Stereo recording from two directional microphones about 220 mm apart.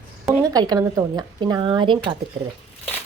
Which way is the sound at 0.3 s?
20° right (ahead or behind).